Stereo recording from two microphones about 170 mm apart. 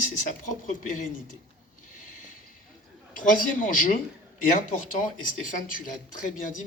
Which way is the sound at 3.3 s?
50° left (ahead or behind).